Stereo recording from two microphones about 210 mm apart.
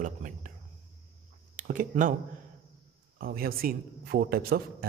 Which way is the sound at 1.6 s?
40° right (ahead or behind).